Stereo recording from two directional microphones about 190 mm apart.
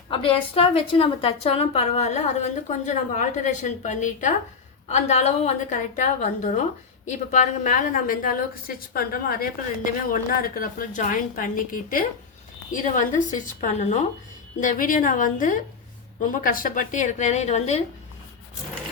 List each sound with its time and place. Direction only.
0.1 s a woman's voice: 30° left (ahead or behind)